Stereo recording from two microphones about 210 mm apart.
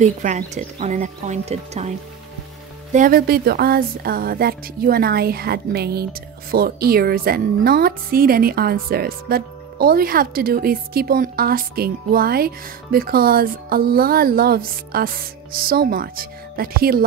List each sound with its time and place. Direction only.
0.0 s a woman's voice: 35° right (ahead or behind)